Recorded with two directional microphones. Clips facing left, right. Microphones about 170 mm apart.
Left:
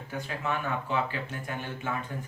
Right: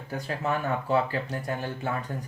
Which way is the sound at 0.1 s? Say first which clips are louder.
Right 3 dB; 40° right (ahead or behind).